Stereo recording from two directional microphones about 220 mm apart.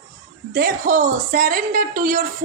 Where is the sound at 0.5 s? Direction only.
40° right (ahead or behind).